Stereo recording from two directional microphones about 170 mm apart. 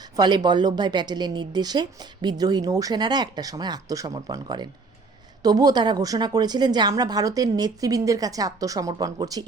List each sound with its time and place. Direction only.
0.2 s a woman's voice: 25° right (ahead or behind)